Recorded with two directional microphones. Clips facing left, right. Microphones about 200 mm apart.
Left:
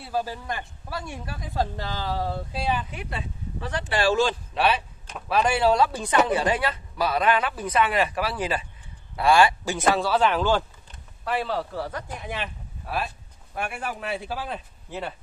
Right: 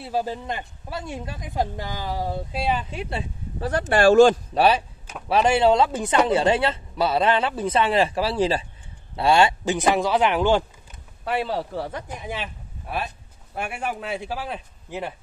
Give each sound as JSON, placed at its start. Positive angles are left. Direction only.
{"t": 0.0, "sound": "speech", "side_deg": -25}
{"t": 5.3, "sound": "speech", "side_deg": -25}
{"t": 12.2, "sound": "speech", "side_deg": -10}
{"t": 14.1, "sound": "speech", "side_deg": -15}